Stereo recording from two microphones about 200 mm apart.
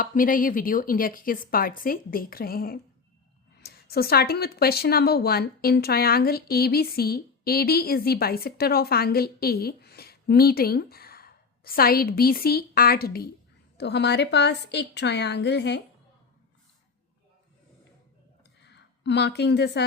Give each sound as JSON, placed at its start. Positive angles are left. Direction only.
{"t": 0.0, "sound": "a woman's voice", "side_deg": 45}
{"t": 18.6, "sound": "a woman's voice", "side_deg": 60}